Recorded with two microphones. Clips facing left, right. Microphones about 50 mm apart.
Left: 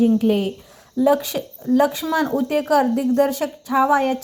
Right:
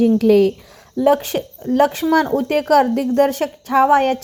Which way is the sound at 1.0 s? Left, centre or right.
Right.